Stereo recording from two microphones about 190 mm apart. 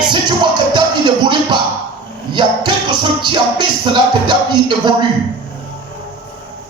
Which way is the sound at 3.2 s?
25° right (ahead or behind).